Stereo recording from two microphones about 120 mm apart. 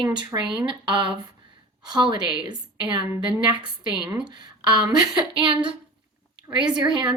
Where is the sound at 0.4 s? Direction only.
45° right (ahead or behind).